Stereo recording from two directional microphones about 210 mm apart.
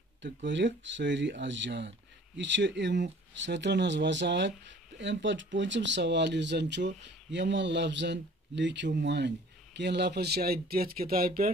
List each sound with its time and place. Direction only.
0.2 s speech: 60° right (ahead or behind)